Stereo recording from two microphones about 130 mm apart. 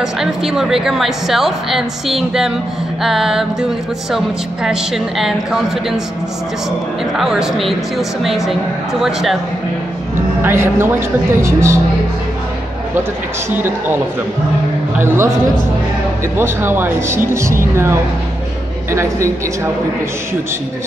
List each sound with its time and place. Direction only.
0.0 s a woman's voice: 5° right (ahead or behind)
4.6 s a woman's voice: centre (ahead or behind)
7.2 s a woman's voice: 5° right (ahead or behind)
10.4 s speech: 20° right (ahead or behind)
13.5 s speech: 15° right (ahead or behind)
16.3 s speech: 20° right (ahead or behind)